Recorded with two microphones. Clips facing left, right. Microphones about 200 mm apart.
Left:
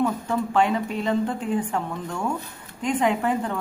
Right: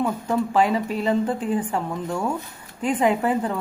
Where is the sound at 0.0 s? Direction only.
10° right (ahead or behind).